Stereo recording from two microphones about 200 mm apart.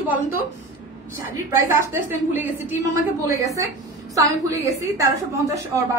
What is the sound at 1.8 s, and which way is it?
A woman's voice, 10° right (ahead or behind).